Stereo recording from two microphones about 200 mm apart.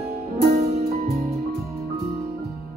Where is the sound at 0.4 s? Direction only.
35° right (ahead or behind).